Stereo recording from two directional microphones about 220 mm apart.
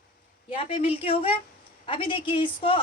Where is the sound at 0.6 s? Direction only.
25° left (ahead or behind).